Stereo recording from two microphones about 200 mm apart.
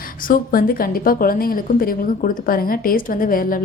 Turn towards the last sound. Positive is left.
turn(degrees=45)  # may be behind; listen again after turning